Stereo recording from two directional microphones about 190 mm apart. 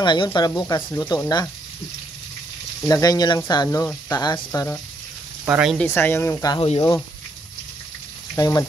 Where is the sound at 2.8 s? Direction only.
20° left (ahead or behind).